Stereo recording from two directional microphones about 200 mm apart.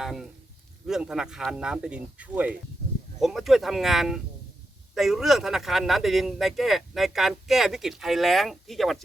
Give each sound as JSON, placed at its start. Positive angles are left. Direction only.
{"t": 0.0, "sound": "a man's voice", "side_deg": 0}